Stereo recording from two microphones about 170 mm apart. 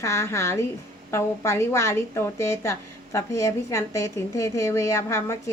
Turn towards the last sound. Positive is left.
turn(degrees=15)  # may be behind; listen again after turning